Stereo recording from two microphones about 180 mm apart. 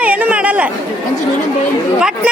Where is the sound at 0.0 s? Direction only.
10° right (ahead or behind).